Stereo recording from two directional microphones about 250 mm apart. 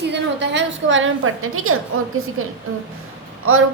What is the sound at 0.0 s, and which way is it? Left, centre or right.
A woman's voice, right.